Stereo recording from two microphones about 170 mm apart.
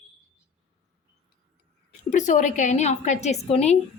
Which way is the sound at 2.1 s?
45° left (ahead or behind).